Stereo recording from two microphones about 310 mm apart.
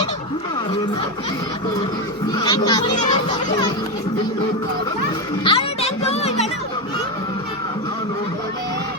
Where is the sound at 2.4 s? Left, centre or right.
Centre.